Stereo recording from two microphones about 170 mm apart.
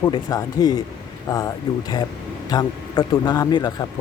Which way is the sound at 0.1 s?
20° left (ahead or behind).